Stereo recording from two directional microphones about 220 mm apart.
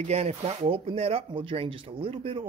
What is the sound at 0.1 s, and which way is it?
Speech, 30° right (ahead or behind).